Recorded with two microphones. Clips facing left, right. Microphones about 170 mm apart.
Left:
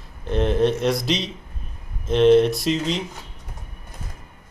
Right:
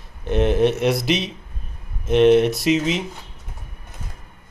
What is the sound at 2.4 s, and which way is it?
Speech, centre (ahead or behind).